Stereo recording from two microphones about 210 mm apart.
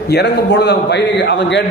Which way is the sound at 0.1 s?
55° left (ahead or behind).